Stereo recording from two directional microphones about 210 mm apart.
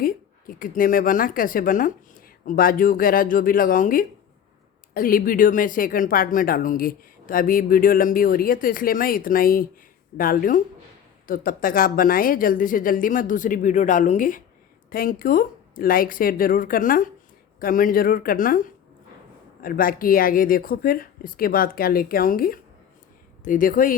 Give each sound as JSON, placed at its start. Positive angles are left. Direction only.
{"t": 0.0, "sound": "speech", "side_deg": 45}